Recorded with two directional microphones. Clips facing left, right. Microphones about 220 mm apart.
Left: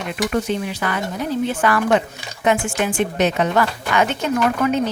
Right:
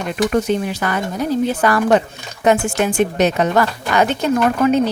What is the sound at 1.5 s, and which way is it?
A woman's voice, 40° right (ahead or behind).